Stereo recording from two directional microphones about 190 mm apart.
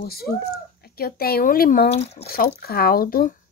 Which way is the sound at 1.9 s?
35° left (ahead or behind).